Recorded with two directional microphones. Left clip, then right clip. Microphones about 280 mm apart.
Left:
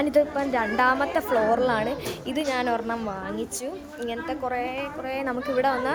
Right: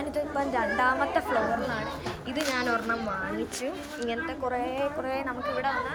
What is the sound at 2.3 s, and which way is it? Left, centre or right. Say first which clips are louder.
Speech: left 2 dB; centre.